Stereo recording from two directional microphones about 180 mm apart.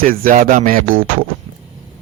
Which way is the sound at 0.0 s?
50° right (ahead or behind).